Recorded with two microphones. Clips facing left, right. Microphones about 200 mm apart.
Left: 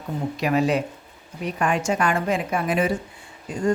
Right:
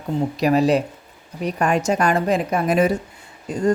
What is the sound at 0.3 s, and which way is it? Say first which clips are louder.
Speech: right 4 dB; 35° right (ahead or behind).